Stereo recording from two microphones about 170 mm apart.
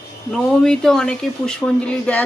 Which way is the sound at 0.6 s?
5° left (ahead or behind).